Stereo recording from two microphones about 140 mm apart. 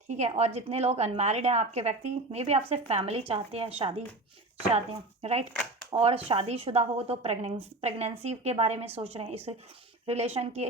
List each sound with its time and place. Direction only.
0.1 s a woman's voice: 55° right (ahead or behind)
5.2 s a woman's voice: 45° right (ahead or behind)